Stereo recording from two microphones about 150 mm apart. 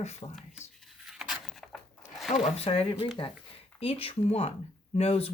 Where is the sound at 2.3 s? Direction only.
45° left (ahead or behind).